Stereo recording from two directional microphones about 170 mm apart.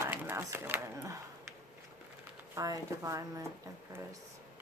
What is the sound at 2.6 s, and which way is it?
Speech, 20° right (ahead or behind).